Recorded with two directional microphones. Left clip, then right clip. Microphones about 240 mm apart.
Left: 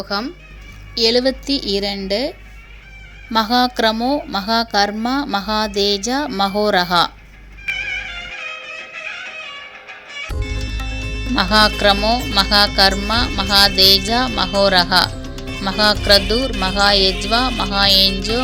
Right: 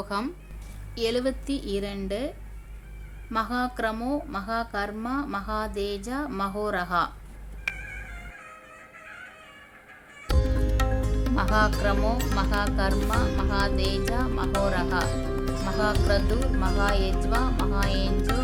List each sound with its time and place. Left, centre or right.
0.0 s music: centre
3.3 s speech: left
7.7 s music: left
11.3 s music: centre
14.1 s speech: centre
15.6 s music: centre